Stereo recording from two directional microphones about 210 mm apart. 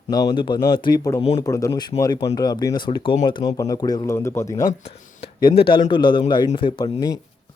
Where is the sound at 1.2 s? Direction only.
30° left (ahead or behind).